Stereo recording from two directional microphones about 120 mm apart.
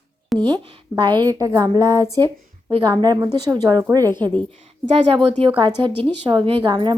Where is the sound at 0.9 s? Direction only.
40° right (ahead or behind).